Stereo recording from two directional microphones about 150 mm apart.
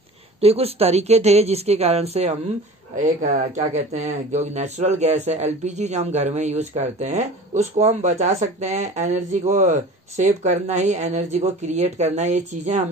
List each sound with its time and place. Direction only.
0.4 s speech: 40° right (ahead or behind)